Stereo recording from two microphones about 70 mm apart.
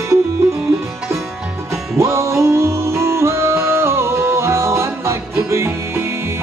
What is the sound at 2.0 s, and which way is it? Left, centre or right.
Music, right.